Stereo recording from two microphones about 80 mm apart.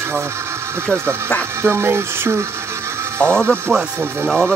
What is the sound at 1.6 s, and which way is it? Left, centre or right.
Speech, right.